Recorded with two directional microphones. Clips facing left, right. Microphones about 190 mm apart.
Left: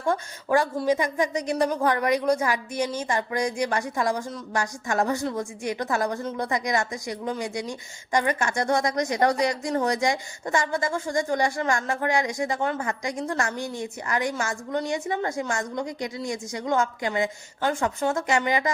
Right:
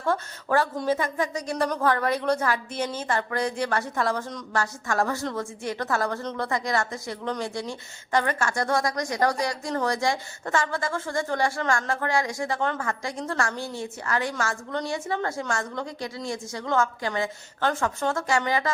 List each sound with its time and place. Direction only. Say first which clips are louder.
0.0 s a woman's voice: left 1 dB; 15° left (ahead or behind)